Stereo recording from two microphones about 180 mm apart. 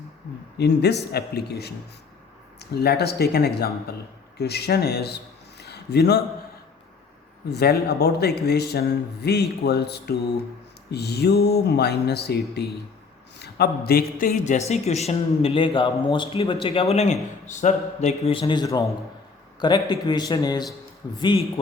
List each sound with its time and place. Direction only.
0.6 s a man's voice: 65° left (ahead or behind)
7.5 s a man's voice: 65° left (ahead or behind); by 21.2 s 20° left (ahead or behind)